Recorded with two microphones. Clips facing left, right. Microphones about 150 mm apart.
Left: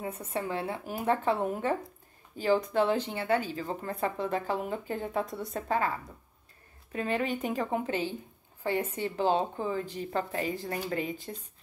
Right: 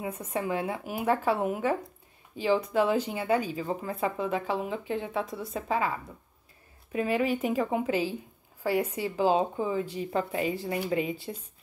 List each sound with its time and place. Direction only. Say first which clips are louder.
0.0 s a woman's voice: right 2 dB; 15° right (ahead or behind)
11.0 s speech: right 3 dB; 35° left (ahead or behind)